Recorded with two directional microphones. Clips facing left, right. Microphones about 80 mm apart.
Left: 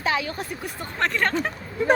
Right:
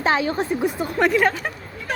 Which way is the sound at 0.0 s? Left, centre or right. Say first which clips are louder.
Right 5 dB; right.